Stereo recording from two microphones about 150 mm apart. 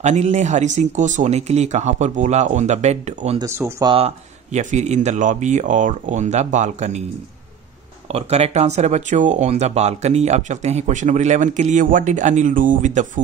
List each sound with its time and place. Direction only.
0.0 s speech: 50° right (ahead or behind)
3.3 s speech: 15° right (ahead or behind)
3.8 s speech: 40° right (ahead or behind)
8.1 s speech: 45° right (ahead or behind)